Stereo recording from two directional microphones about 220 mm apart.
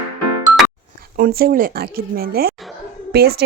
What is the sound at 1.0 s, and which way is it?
Speech, 40° right (ahead or behind).